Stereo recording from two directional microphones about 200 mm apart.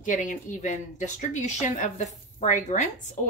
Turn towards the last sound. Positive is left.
turn(degrees=35)  # may be behind; listen again after turning